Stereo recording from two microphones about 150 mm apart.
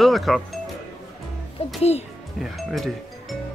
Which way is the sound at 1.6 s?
40° left (ahead or behind).